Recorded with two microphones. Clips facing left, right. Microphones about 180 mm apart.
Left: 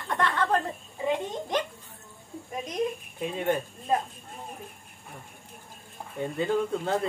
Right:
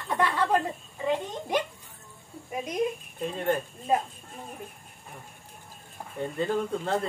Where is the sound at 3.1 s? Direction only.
5° left (ahead or behind).